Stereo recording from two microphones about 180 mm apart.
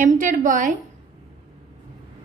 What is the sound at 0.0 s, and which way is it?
Speech, 45° right (ahead or behind).